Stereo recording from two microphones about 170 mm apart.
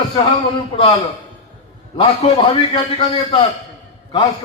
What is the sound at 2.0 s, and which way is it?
A man's voice, 35° left (ahead or behind).